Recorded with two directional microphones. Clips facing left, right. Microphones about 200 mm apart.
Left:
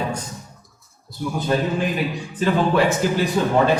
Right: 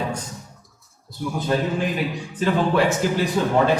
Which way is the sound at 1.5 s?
15° left (ahead or behind).